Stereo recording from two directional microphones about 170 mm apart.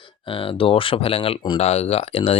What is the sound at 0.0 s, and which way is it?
Speech, 30° left (ahead or behind).